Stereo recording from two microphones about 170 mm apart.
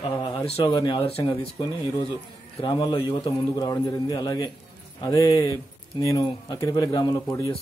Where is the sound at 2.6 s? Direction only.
25° left (ahead or behind).